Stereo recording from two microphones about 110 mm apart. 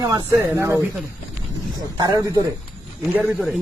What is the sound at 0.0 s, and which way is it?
Speech, 35° right (ahead or behind).